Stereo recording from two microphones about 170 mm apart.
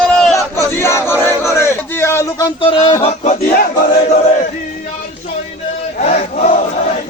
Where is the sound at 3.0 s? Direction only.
40° left (ahead or behind).